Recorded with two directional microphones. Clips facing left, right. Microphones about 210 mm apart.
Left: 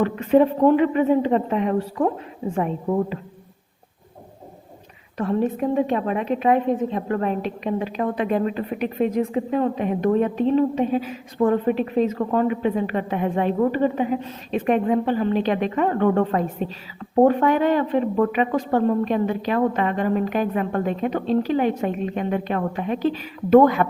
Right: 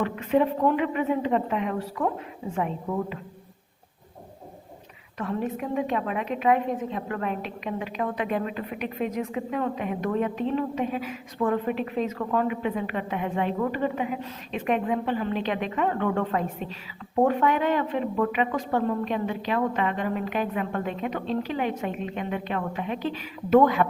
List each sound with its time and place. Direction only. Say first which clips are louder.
0.0 s a woman's voice: left 6 dB; 35° left (ahead or behind)
5.1 s a woman's voice: left 7 dB; 35° left (ahead or behind)